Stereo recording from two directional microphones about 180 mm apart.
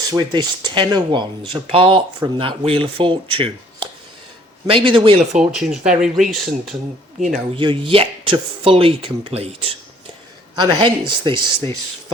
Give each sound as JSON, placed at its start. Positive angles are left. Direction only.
{"t": 0.1, "sound": "speech", "side_deg": -25}
{"t": 5.4, "sound": "speech", "side_deg": -5}
{"t": 7.5, "sound": "speech", "side_deg": -30}